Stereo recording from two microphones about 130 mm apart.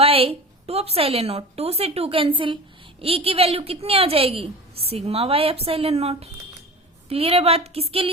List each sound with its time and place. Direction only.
0.0 s a woman's voice: 50° right (ahead or behind)